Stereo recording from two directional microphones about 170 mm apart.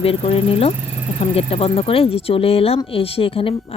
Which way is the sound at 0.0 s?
35° left (ahead or behind).